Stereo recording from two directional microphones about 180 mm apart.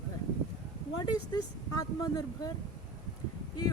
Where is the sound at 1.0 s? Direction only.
20° left (ahead or behind).